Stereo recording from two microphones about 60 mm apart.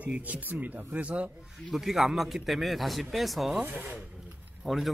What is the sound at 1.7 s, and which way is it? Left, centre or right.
Speech, centre.